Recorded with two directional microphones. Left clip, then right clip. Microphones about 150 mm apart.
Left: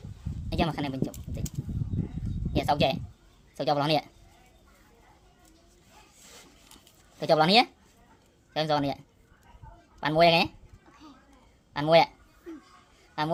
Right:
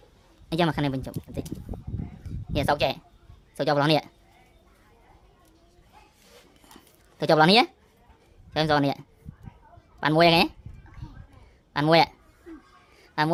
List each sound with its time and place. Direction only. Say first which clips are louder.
0.5 s speech: right 5 dB; 40° right (ahead or behind)
2.5 s speech: right 1 dB; 40° right (ahead or behind)
6.7 s a sound: right 5 dB; 45° right (ahead or behind)
8.5 s speech: right 4 dB; 45° right (ahead or behind)
11.7 s speech: right 1 dB; 45° right (ahead or behind)
13.0 s a sound: right 5 dB; 45° right (ahead or behind)